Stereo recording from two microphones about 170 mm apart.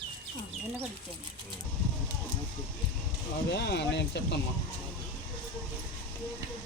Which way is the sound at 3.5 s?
85° left.